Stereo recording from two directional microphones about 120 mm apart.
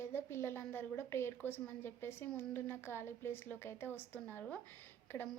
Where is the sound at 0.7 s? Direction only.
20° left (ahead or behind).